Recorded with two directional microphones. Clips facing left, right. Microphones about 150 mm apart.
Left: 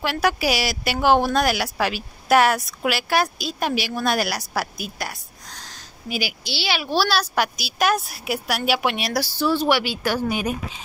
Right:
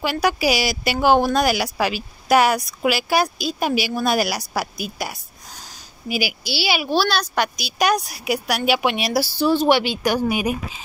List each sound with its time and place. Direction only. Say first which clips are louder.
0.0 s speech: right 2 dB; centre (ahead or behind)
7.0 s speech: left 2 dB; 5° left (ahead or behind)
9.4 s a woman's voice: right 3 dB; 20° right (ahead or behind)